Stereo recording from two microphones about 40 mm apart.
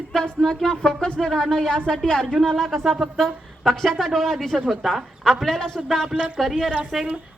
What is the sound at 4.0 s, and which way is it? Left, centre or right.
Music, centre.